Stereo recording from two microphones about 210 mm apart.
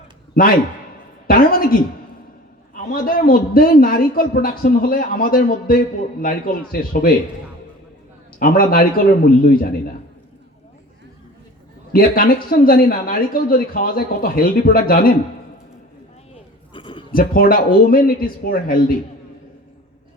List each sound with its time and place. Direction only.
1.3 s a man's voice: 45° left (ahead or behind)
8.4 s a man's voice: 45° left (ahead or behind)
11.9 s a man's voice: 45° left (ahead or behind)
16.7 s a sound: 25° left (ahead or behind)
17.1 s a man's voice: 45° left (ahead or behind)